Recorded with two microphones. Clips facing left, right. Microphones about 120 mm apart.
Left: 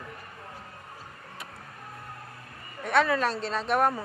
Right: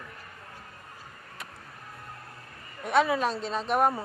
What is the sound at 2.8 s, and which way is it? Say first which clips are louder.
Speech: even; 5° right (ahead or behind).